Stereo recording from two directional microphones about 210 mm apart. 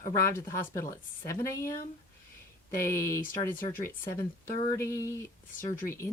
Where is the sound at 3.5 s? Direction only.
40° left (ahead or behind).